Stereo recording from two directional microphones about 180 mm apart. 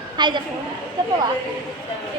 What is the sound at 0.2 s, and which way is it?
Speech, 25° right (ahead or behind).